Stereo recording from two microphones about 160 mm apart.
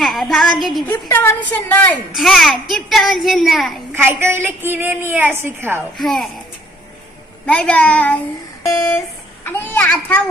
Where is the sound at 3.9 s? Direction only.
10° right (ahead or behind).